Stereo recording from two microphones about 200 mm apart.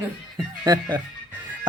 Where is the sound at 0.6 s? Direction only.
20° right (ahead or behind).